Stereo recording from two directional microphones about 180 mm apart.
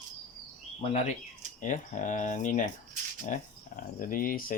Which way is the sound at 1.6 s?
45° left (ahead or behind).